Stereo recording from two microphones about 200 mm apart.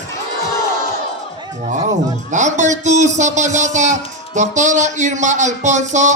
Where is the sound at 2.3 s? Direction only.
35° right (ahead or behind).